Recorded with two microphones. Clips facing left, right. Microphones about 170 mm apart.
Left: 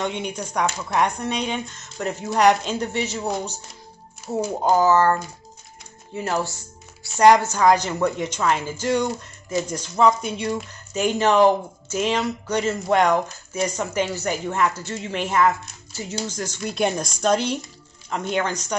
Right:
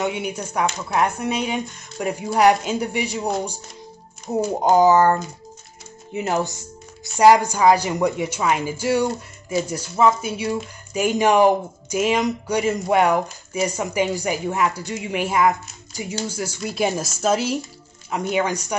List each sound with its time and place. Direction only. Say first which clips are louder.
0.0 s speech: right 2 dB; 10° right (ahead or behind)